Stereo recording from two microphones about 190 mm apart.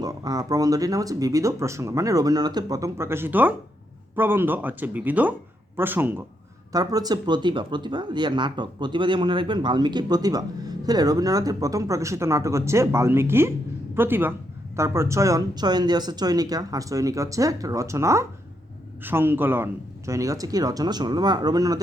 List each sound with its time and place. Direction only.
0.0 s speech: 20° right (ahead or behind)